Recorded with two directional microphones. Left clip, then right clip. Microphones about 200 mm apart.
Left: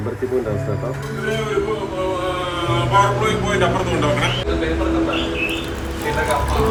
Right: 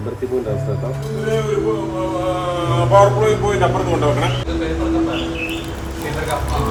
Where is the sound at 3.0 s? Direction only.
35° right (ahead or behind).